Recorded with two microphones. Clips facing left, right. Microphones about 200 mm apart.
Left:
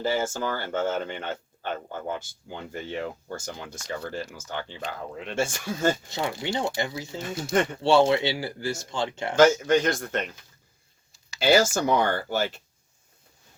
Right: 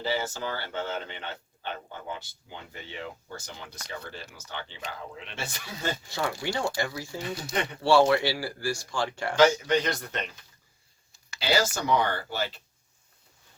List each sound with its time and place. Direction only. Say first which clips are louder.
0.0 s speech: left 4 dB; 45° left (ahead or behind)
6.1 s speech: left 1 dB; 20° left (ahead or behind)
7.5 s speech: left 8 dB; 45° left (ahead or behind)
7.8 s speech: right 1 dB; 20° left (ahead or behind)
9.3 s speech: left 3 dB; 45° left (ahead or behind)
11.3 s speech: left 6 dB; 50° left (ahead or behind)